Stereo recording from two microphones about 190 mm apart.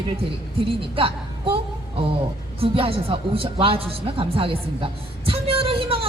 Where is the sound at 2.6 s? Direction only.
30° right (ahead or behind).